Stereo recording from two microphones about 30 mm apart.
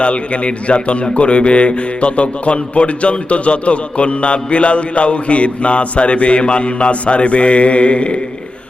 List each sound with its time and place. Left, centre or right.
0.0 s speech: left